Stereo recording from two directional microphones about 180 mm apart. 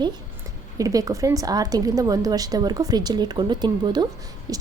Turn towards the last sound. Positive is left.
turn(degrees=-20)  # may be behind; listen again after turning